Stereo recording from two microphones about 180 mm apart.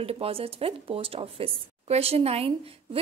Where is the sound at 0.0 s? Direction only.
30° right (ahead or behind).